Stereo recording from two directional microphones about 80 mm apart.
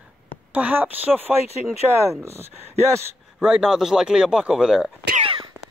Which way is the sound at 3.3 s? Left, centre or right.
Centre.